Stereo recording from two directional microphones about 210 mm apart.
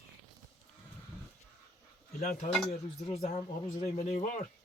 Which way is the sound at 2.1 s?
45° left (ahead or behind).